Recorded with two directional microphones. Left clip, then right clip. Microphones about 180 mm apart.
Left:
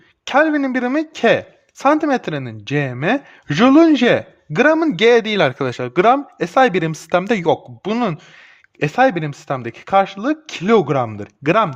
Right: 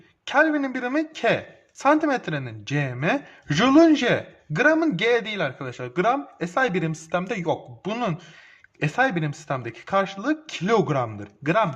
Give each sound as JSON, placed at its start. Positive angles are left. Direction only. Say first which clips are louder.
{"t": 0.3, "sound": "speech", "louder": "left 5 dB", "side_deg": 45}
{"t": 10.9, "sound": "speech", "louder": "left 6 dB", "side_deg": 45}